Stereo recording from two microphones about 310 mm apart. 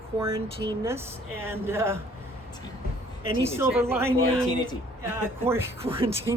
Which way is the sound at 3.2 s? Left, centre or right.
Centre.